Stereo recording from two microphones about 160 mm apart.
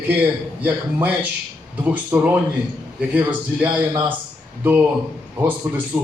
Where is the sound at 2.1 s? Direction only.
15° right (ahead or behind).